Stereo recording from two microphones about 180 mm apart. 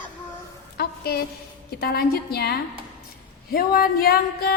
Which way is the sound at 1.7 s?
60° left (ahead or behind).